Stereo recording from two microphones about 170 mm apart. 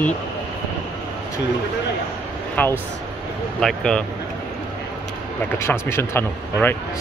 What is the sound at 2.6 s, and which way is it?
Speech, 10° left (ahead or behind).